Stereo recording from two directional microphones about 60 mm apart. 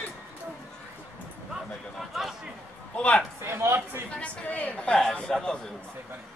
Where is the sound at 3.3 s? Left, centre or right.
Right.